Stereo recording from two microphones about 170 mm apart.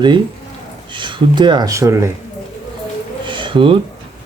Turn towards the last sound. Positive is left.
turn(degrees=-30)  # may be behind; listen again after turning